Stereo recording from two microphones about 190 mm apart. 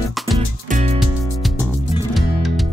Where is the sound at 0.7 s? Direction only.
35° right (ahead or behind).